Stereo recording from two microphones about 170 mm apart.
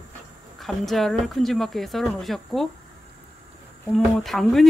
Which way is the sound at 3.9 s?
Centre (ahead or behind).